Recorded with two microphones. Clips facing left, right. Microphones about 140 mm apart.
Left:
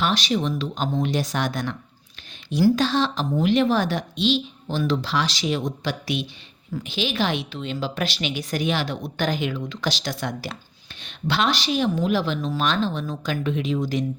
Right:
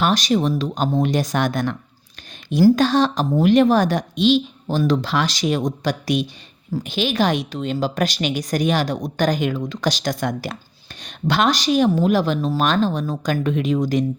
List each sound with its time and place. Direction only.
0.0 s a woman's voice: 45° right (ahead or behind)